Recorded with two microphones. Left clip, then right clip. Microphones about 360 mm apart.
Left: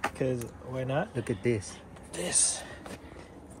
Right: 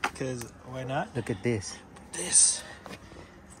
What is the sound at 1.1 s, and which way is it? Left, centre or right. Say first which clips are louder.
Speech: even; centre.